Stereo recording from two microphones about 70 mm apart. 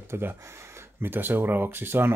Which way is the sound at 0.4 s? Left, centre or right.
Right.